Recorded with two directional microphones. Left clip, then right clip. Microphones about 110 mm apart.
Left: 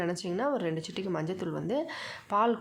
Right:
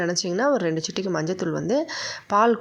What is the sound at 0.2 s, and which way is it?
Speech, 50° right (ahead or behind).